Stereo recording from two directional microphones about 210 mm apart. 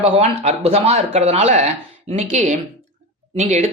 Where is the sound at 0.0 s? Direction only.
30° right (ahead or behind).